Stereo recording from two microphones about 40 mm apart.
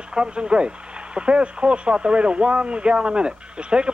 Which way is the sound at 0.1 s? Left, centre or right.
Right.